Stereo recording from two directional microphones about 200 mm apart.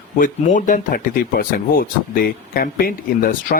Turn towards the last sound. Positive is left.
turn(degrees=45)  # may be behind; listen again after turning